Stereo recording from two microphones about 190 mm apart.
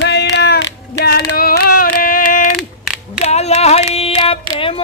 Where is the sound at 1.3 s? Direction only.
50° left (ahead or behind).